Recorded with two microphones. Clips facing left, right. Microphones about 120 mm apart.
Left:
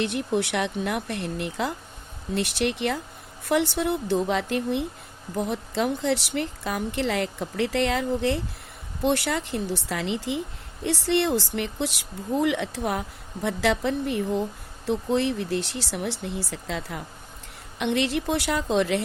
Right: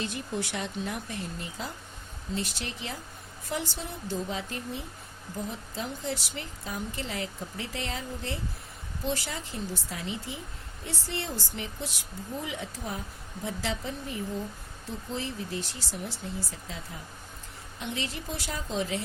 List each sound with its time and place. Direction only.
0.0 s speech: 65° left (ahead or behind)